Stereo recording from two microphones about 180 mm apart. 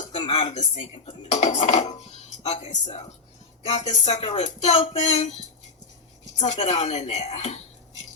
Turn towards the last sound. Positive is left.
turn(degrees=35)  # may be behind; listen again after turning